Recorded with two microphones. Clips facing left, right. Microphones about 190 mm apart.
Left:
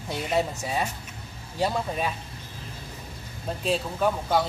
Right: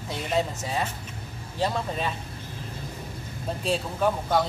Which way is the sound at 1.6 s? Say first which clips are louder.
Left 1 dB; 10° left (ahead or behind).